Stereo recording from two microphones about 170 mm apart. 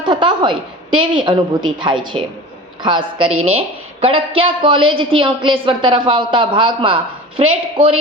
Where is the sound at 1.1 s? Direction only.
30° right (ahead or behind).